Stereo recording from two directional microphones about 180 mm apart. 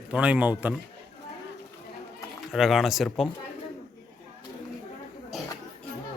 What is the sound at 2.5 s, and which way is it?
Speech, centre (ahead or behind).